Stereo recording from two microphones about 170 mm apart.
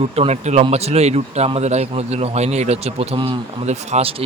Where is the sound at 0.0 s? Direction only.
35° right (ahead or behind).